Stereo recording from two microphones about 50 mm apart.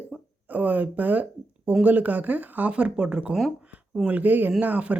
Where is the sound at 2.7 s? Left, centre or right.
Centre.